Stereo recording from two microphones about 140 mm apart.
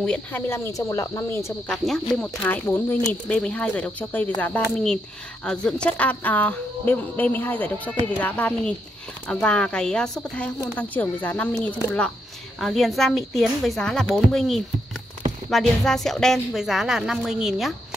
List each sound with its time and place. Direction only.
0.0 s a woman's voice: 5° left (ahead or behind)
0.5 s speech: 20° left (ahead or behind)
1.7 s a woman's voice: 5° left (ahead or behind)